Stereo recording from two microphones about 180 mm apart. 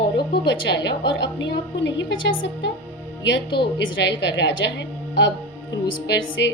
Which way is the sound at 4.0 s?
75° left (ahead or behind).